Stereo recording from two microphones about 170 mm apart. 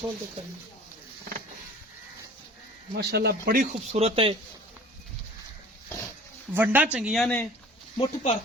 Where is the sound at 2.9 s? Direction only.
75° right (ahead or behind); by 3.7 s 55° right (ahead or behind).